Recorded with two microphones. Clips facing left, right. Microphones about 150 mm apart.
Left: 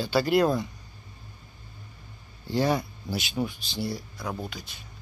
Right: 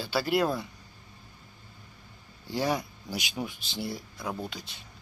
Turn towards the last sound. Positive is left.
turn(degrees=-30)  # may be behind; listen again after turning